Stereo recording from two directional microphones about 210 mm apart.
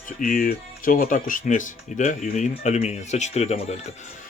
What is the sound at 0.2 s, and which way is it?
Speech, 40° left (ahead or behind).